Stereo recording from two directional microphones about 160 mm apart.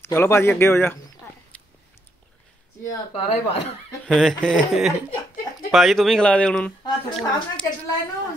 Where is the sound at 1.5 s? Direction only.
10° left (ahead or behind).